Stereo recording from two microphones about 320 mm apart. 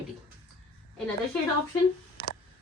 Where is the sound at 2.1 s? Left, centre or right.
Left.